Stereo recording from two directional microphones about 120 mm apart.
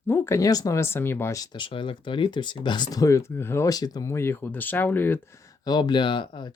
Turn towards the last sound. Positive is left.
turn(degrees=40)  # may be behind; listen again after turning